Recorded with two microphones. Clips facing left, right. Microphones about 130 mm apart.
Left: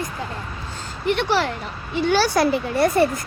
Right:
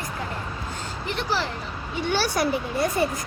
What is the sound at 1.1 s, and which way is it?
Speech, 75° left (ahead or behind).